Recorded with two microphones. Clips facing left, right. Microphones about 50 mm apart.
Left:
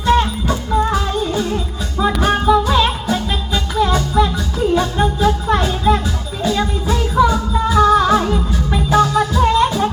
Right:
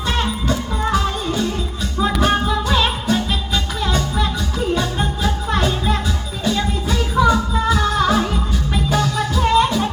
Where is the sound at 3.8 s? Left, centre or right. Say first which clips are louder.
Left 8 dB; centre.